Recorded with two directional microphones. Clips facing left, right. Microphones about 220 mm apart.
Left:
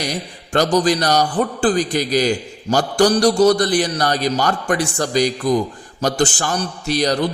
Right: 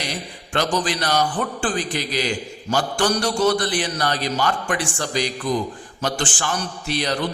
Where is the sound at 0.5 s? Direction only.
40° left (ahead or behind).